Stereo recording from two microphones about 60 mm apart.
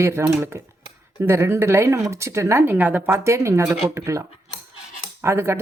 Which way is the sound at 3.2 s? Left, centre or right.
Right.